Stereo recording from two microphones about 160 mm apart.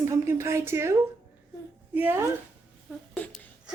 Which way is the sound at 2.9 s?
5° left (ahead or behind).